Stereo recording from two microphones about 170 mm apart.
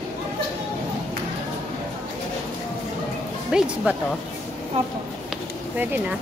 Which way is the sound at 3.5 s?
5° right (ahead or behind).